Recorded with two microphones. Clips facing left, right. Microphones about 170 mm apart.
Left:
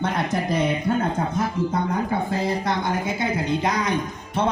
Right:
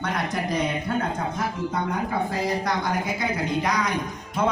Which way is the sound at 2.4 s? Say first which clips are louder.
Left 1 dB; 25° left (ahead or behind).